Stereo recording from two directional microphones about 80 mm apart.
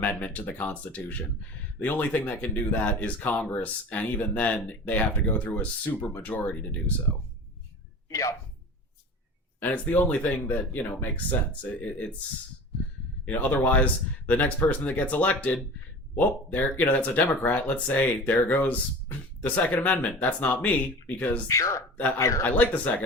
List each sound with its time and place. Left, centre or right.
0.0 s speech: centre
8.1 s speech: left
9.6 s speech: left
13.2 s speech: centre
21.4 s speech: left
22.4 s speech: centre